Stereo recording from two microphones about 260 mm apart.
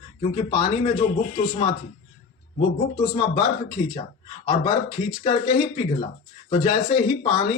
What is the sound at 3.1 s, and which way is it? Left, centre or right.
Speech, centre.